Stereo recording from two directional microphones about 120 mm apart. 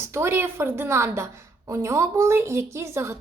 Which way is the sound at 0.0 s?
20° right (ahead or behind).